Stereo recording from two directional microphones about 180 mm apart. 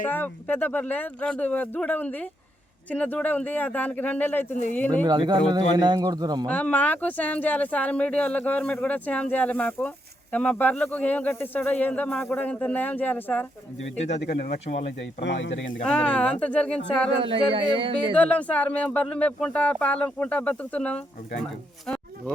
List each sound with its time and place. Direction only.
0.0 s speech: 10° left (ahead or behind)
5.0 s speech: 25° right (ahead or behind)
6.5 s speech: 10° left (ahead or behind)
14.3 s speech: 45° left (ahead or behind)
15.2 s speech: 85° left
15.8 s speech: 5° left (ahead or behind)
17.2 s speech: 30° right (ahead or behind)
18.2 s speech: 10° left (ahead or behind)